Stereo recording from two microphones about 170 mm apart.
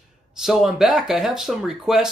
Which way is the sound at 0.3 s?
Centre (ahead or behind).